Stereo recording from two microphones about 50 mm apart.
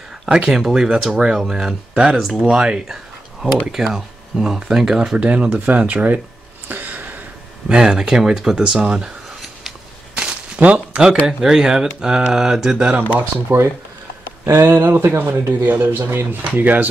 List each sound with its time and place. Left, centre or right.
0.3 s speech: centre
5.1 s speech: right
6.7 s a sound: right
7.6 s speech: centre
10.1 s a sound: right
11.2 s speech: centre
13.5 s speech: right